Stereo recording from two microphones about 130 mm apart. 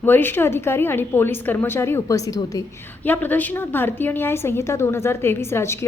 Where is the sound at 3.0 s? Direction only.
15° left (ahead or behind).